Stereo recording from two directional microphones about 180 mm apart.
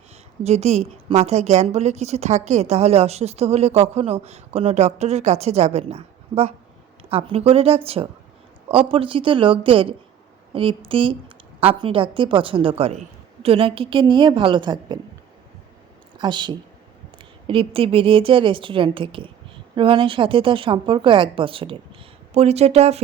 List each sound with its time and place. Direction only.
0.4 s a woman's voice: 35° right (ahead or behind)
16.1 s a woman's voice: 25° right (ahead or behind)